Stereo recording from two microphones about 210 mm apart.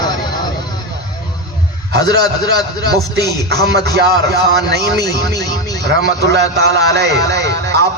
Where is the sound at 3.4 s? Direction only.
50° right (ahead or behind).